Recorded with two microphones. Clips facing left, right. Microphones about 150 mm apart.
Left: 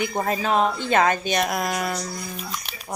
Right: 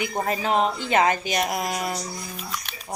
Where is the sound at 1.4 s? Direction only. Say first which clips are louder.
Left 1 dB; 55° left (ahead or behind).